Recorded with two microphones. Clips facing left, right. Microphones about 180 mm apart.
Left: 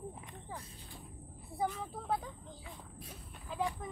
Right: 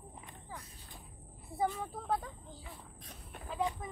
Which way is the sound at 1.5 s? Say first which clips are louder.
Right 2 dB; centre (ahead or behind).